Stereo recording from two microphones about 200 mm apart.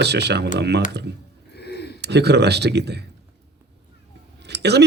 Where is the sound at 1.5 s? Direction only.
55° left (ahead or behind).